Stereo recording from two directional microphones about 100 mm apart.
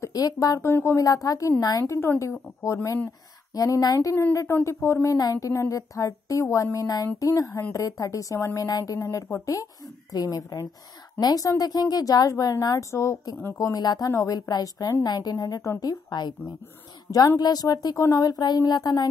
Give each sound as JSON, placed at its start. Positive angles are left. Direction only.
{"t": 0.0, "sound": "a woman's voice", "side_deg": 35}
{"t": 1.0, "sound": "a woman's voice", "side_deg": 35}
{"t": 5.1, "sound": "a woman's voice", "side_deg": 35}
{"t": 13.7, "sound": "a woman's voice", "side_deg": 40}
{"t": 17.4, "sound": "a woman's voice", "side_deg": 40}